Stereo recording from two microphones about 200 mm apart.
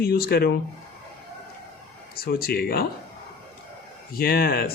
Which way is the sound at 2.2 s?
50° left (ahead or behind).